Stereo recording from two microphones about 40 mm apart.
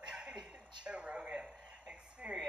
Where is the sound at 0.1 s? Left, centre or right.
Right.